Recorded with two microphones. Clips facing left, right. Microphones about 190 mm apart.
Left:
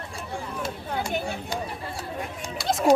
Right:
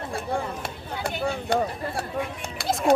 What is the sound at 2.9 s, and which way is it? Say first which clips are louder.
Speech: left 1 dB; 55° right (ahead or behind).